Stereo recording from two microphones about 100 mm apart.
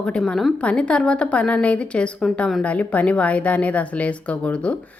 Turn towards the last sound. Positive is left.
turn(degrees=10)  # may be behind; listen again after turning